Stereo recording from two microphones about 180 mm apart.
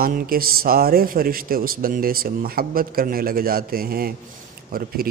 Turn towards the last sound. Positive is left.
turn(degrees=-55)  # may be behind; listen again after turning